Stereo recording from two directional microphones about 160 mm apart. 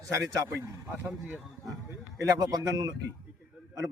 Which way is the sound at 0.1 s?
20° right (ahead or behind).